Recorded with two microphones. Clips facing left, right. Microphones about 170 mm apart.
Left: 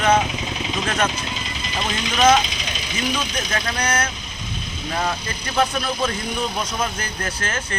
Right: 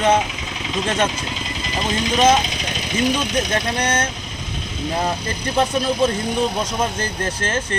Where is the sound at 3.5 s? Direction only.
25° right (ahead or behind).